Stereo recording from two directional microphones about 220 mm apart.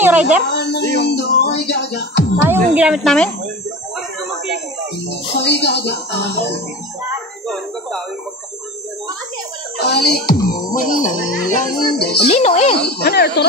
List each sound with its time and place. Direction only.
0.0 s a sound: 5° right (ahead or behind)
0.5 s music: 50° left (ahead or behind)
2.5 s a woman's voice: 5° right (ahead or behind)
5.4 s speech: 50° left (ahead or behind)
9.8 s music: 50° left (ahead or behind)
10.3 s music: 15° left (ahead or behind)
10.7 s music: 35° left (ahead or behind)
12.0 s speech: 45° left (ahead or behind)
12.3 s speech: 30° left (ahead or behind)
12.7 s speech: 45° left (ahead or behind)